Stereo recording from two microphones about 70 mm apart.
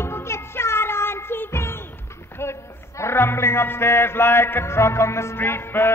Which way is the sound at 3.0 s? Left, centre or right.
Left.